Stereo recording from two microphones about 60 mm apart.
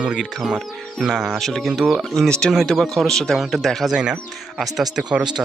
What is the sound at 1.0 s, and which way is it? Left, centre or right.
Speech, centre.